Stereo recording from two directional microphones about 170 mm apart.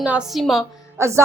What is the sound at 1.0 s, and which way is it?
Speech, 15° right (ahead or behind).